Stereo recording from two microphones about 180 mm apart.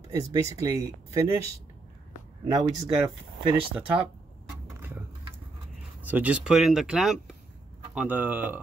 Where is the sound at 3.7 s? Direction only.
5° right (ahead or behind).